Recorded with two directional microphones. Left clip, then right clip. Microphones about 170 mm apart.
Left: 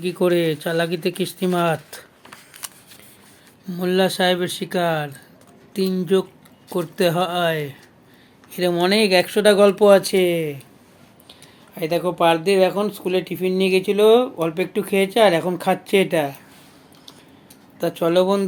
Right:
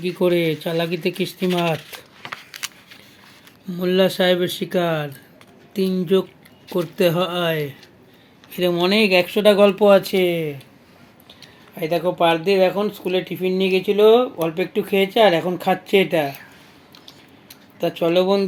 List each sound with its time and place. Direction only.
0.0 s speech: centre (ahead or behind)
2.5 s a sound: 25° left (ahead or behind)
3.7 s speech: centre (ahead or behind)
17.7 s speech: centre (ahead or behind)